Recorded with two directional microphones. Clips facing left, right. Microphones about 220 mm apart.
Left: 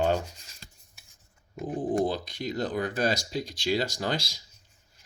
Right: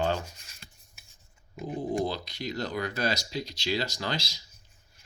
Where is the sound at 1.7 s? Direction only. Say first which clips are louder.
Left 3 dB; 50° left (ahead or behind).